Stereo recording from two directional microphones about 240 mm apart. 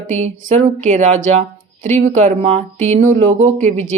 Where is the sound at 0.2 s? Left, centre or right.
Right.